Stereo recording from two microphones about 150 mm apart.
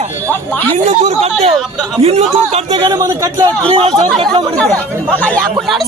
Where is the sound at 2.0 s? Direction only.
45° right (ahead or behind).